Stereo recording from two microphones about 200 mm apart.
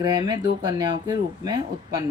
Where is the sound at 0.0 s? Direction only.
20° right (ahead or behind).